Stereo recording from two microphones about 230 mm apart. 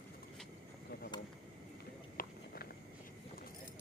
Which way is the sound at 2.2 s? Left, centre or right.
Left.